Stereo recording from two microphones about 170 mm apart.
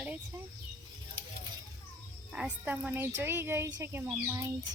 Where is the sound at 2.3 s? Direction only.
5° right (ahead or behind).